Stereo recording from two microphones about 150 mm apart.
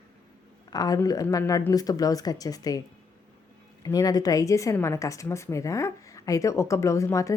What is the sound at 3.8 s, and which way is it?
A woman's voice, 25° left (ahead or behind).